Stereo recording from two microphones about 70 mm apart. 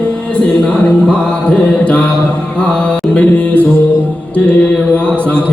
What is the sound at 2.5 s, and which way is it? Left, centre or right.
Music, centre.